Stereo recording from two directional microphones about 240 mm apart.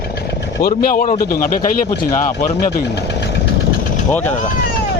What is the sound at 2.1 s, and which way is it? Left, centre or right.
Speech, centre.